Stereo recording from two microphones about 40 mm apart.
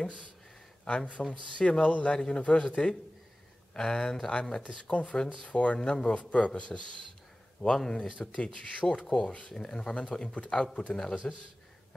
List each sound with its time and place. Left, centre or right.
0.8 s speech: left
1.2 s speech: left
1.8 s speech: left
2.1 s speech: centre
5.8 s speech: centre
6.1 s speech: left
7.6 s speech: centre
8.2 s speech: left
9.0 s speech: centre